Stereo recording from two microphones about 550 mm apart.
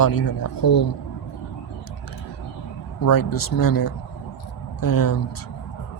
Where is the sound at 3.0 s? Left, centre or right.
Left.